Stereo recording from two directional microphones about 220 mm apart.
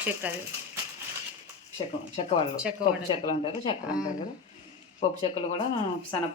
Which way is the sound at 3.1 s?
20° left (ahead or behind).